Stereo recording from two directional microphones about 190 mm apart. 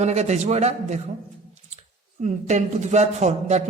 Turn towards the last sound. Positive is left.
turn(degrees=-35)  # may be behind; listen again after turning